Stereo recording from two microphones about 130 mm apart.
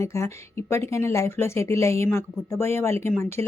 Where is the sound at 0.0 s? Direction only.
20° left (ahead or behind).